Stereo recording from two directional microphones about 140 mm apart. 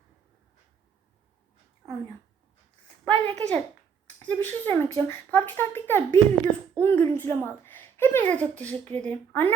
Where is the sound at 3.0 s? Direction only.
10° left (ahead or behind).